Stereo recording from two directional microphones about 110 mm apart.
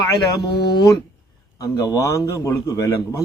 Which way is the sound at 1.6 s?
30° left (ahead or behind).